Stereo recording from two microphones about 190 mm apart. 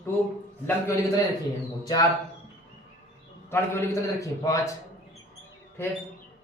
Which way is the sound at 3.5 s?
15° left (ahead or behind).